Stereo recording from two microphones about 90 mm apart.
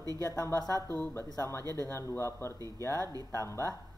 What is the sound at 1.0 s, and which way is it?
Speech, 30° left (ahead or behind).